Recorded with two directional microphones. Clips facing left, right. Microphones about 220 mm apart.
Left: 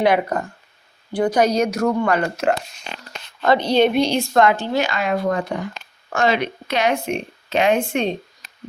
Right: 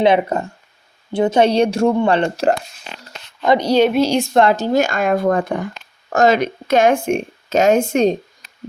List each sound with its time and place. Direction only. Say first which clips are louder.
0.0 s a woman's voice: right 3 dB; 25° right (ahead or behind)
3.4 s speech: right 2 dB; 15° right (ahead or behind)
4.4 s speech: right 3 dB; 35° right (ahead or behind)
6.1 s speech: right 5 dB; 40° right (ahead or behind)